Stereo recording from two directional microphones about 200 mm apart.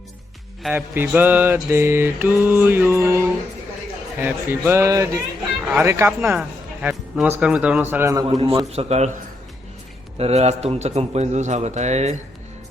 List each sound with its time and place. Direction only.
0.7 s mantra: 10° right (ahead or behind)
4.2 s mantra: 10° right (ahead or behind)
8.3 s a man's voice: 30° right (ahead or behind)
10.2 s a man's voice: 30° right (ahead or behind)